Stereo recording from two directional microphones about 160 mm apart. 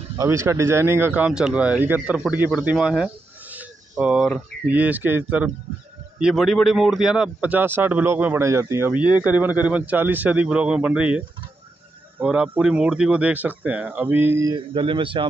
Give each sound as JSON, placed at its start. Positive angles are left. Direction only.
{"t": 0.2, "sound": "a man's voice", "side_deg": -15}
{"t": 3.5, "sound": "a sound", "side_deg": -5}
{"t": 4.6, "sound": "a man's voice", "side_deg": -10}
{"t": 14.5, "sound": "speech", "side_deg": -30}